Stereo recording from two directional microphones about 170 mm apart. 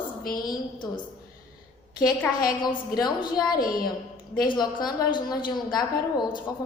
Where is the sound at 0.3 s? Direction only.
25° left (ahead or behind).